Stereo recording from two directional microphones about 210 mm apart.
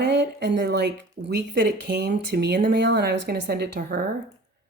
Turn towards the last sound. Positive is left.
turn(degrees=-50)  # may be behind; listen again after turning